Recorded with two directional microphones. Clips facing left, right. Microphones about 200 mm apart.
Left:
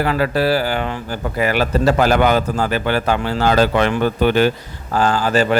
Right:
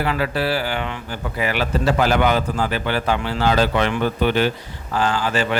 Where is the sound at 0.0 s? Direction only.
45° left (ahead or behind).